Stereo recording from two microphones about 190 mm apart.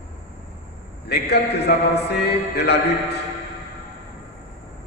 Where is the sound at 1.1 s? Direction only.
60° left (ahead or behind).